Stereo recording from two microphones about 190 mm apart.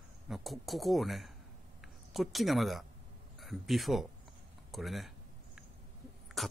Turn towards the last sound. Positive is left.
turn(degrees=0)  # may be behind; listen again after turning